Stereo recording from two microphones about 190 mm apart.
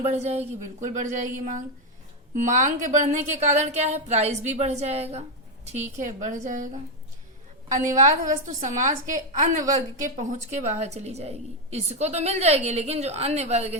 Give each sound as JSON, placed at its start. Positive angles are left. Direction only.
{"t": 0.0, "sound": "a woman's voice", "side_deg": -35}
{"t": 8.0, "sound": "a woman's voice", "side_deg": -40}